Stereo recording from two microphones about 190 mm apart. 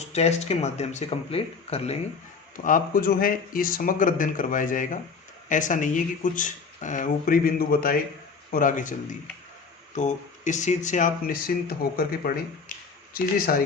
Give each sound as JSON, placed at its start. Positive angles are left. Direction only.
{"t": 0.1, "sound": "speech", "side_deg": 35}
{"t": 2.6, "sound": "speech", "side_deg": 45}